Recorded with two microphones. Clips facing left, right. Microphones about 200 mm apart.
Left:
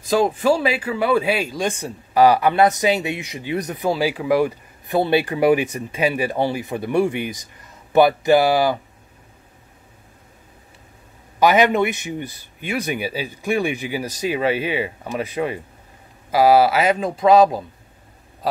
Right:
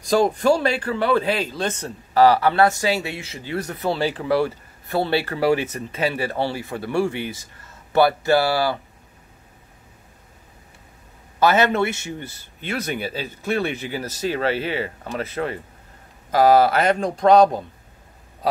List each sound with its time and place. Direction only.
0.0 s speech: 5° left (ahead or behind)
11.3 s speech: 15° left (ahead or behind)